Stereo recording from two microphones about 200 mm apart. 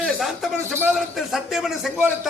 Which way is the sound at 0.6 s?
10° right (ahead or behind).